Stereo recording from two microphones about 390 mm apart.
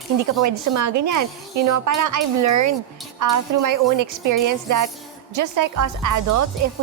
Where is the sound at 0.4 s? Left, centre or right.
Right.